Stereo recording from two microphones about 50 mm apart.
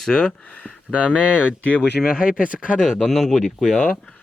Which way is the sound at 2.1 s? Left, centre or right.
Centre.